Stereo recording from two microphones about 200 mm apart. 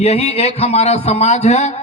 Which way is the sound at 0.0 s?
30° left (ahead or behind).